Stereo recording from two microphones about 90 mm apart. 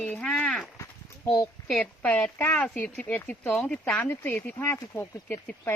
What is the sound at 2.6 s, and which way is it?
Speech, 15° left (ahead or behind).